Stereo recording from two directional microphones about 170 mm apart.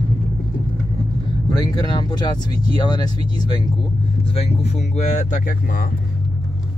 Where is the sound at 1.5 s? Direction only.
25° left (ahead or behind); by 5.9 s 55° left (ahead or behind).